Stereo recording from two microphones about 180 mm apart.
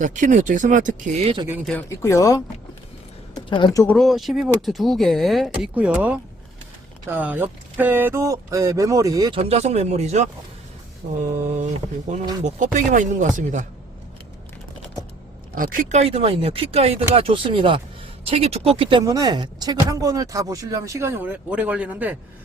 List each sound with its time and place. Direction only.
0.0 s speech: 45° right (ahead or behind)
2.0 s speech: 15° left (ahead or behind)
3.9 s speech: centre (ahead or behind); by 9.4 s 20° right (ahead or behind)
9.4 s speech: 35° right (ahead or behind)
11.0 s speech: 45° right (ahead or behind)
15.5 s speech: 50° right (ahead or behind); by 22.2 s 10° right (ahead or behind)